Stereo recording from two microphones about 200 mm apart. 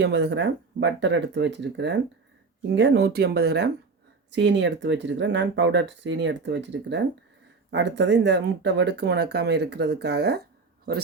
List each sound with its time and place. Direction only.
0.0 s speech: 55° right (ahead or behind)